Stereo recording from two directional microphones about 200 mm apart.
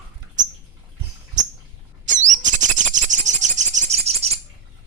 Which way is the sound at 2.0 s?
40° right (ahead or behind).